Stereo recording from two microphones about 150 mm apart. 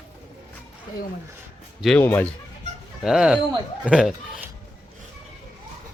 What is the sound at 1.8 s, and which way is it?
Speech, centre (ahead or behind).